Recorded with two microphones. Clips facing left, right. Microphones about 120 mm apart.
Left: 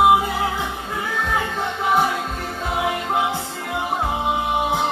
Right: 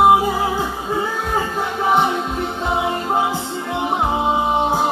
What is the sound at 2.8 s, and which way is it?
Music, 30° right (ahead or behind).